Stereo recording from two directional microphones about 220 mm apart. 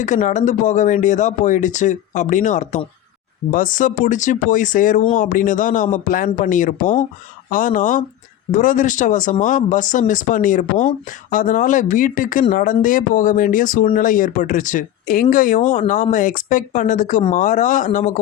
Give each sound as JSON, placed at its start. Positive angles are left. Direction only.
{"t": 0.0, "sound": "speech", "side_deg": 35}